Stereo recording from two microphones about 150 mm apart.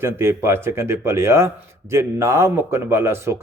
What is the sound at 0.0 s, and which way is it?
Speech, 15° right (ahead or behind).